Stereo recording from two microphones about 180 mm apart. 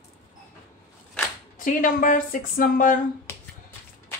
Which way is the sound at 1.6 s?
50° left (ahead or behind).